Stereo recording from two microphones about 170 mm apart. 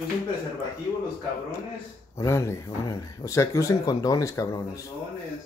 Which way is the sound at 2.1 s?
15° left (ahead or behind).